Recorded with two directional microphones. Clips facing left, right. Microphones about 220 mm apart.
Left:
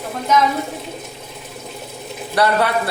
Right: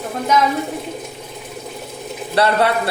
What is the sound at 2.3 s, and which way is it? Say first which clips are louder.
Speech: right 1 dB; 25° right (ahead or behind).